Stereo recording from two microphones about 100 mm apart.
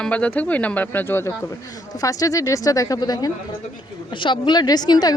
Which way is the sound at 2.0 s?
35° left (ahead or behind).